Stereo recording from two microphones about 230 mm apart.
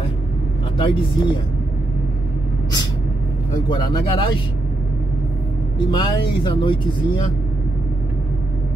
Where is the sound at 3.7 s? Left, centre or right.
Centre.